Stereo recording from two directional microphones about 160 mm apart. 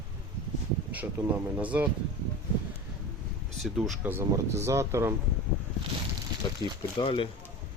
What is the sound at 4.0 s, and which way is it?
Speech, 15° right (ahead or behind).